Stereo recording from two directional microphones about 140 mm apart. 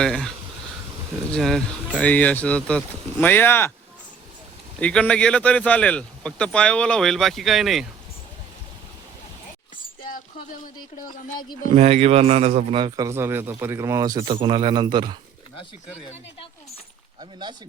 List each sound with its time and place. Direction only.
0.0 s speech: 5° left (ahead or behind)
1.3 s a man's voice: 5° left (ahead or behind)
4.8 s a man's voice: 10° left (ahead or behind)
11.7 s a man's voice: 50° right (ahead or behind)
13.1 s speech: 20° right (ahead or behind)